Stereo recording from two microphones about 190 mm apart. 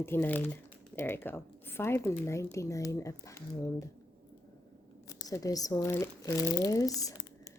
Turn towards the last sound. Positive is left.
turn(degrees=20)  # may be behind; listen again after turning